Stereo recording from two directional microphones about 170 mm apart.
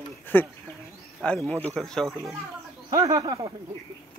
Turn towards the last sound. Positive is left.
turn(degrees=-20)  # may be behind; listen again after turning